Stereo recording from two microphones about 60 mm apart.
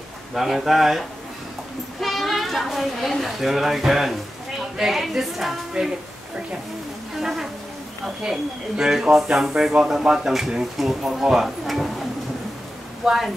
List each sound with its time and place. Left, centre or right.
0.3 s a woman's voice: centre
7.2 s a woman's voice: centre
13.0 s a woman's voice: centre